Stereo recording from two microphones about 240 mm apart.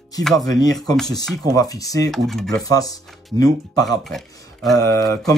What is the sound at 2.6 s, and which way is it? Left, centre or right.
Speech, centre.